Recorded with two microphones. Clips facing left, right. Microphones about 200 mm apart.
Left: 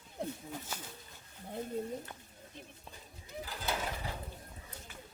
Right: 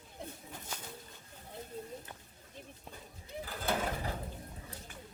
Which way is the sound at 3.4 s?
50° right (ahead or behind).